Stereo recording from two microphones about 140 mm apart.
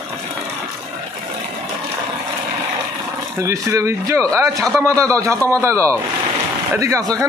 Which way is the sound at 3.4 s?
20° right (ahead or behind).